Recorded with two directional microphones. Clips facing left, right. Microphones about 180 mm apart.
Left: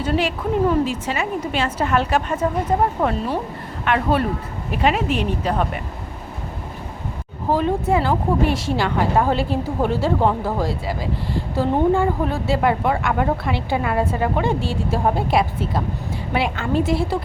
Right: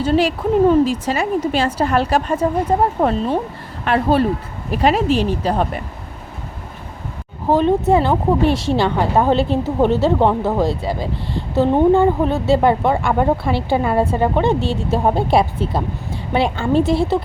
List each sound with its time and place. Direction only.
0.0 s a woman's voice: 30° right (ahead or behind)
7.5 s speech: 25° right (ahead or behind)